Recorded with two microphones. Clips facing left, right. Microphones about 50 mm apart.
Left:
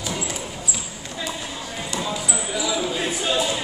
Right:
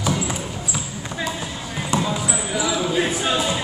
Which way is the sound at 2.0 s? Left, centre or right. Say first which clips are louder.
Right 4 dB; centre.